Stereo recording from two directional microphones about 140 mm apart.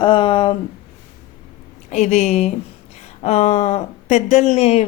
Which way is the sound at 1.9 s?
55° left (ahead or behind).